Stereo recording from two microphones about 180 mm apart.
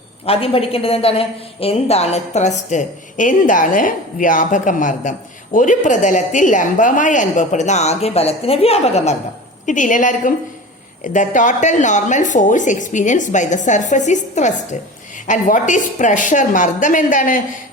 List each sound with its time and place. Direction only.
0.3 s a woman's voice: 35° left (ahead or behind)